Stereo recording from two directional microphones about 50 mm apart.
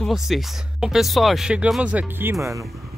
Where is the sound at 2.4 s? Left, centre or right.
Right.